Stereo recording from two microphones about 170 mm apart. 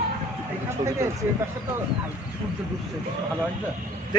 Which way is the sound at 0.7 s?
15° right (ahead or behind).